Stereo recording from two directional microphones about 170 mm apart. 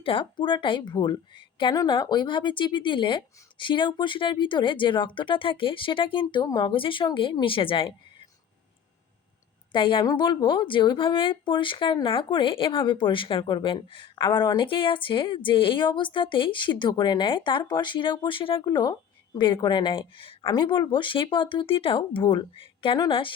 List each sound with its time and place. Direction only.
0.0 s a woman's voice: 30° left (ahead or behind)
9.7 s a woman's voice: 30° left (ahead or behind)